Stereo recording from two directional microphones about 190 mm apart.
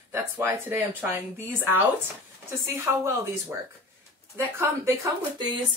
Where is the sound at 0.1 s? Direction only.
10° right (ahead or behind).